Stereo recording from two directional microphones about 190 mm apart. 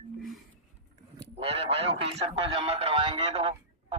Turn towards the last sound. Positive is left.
turn(degrees=-30)  # may be behind; listen again after turning